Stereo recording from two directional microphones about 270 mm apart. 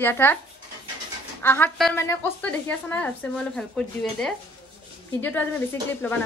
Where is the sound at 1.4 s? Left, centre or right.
Centre.